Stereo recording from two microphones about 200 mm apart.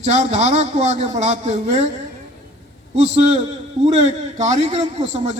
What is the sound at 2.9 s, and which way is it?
A man's voice, 30° right (ahead or behind).